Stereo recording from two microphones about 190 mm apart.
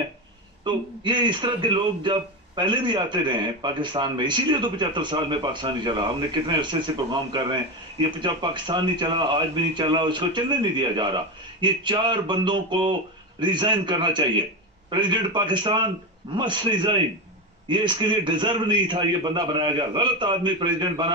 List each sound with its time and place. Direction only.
0.7 s a man's voice: 25° right (ahead or behind)